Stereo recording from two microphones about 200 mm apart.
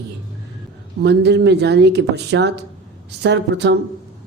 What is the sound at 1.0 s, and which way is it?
Speech, 55° right (ahead or behind).